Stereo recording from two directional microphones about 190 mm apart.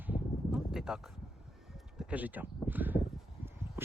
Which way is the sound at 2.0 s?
10° right (ahead or behind).